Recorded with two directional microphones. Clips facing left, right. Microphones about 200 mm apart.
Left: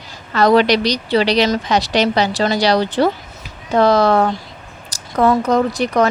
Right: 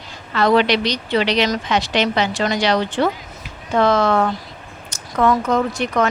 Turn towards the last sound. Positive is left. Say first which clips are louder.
# left 3 dB
turn(degrees=35)  # may be behind; listen again after turning